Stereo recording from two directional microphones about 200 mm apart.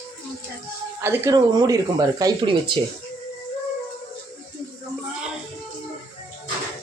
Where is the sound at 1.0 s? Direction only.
10° right (ahead or behind).